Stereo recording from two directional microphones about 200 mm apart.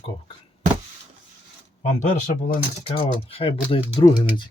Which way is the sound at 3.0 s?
30° left (ahead or behind).